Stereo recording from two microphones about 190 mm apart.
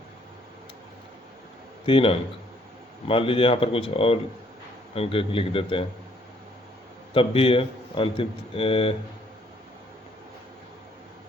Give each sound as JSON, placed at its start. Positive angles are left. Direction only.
{"t": 1.9, "sound": "a man's voice", "side_deg": 30}
{"t": 7.1, "sound": "a man's voice", "side_deg": 30}